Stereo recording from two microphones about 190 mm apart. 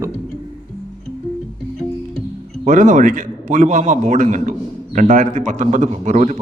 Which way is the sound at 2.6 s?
40° right (ahead or behind).